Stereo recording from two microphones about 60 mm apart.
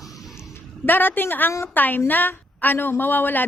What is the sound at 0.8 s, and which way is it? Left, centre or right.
A woman's voice, left.